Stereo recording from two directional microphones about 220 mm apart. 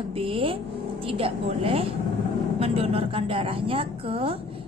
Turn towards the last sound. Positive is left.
turn(degrees=-25)  # may be behind; listen again after turning